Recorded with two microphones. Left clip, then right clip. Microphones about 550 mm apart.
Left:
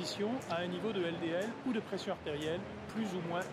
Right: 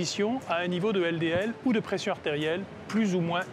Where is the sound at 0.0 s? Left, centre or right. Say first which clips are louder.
Right 8 dB; right.